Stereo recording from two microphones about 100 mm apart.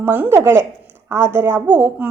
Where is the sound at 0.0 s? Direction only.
20° right (ahead or behind).